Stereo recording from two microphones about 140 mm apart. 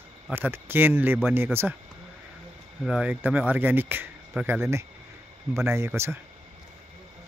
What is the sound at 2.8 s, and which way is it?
Speech, 5° right (ahead or behind).